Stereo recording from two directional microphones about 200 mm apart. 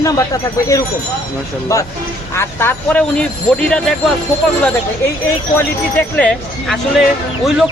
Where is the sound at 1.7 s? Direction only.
15° left (ahead or behind).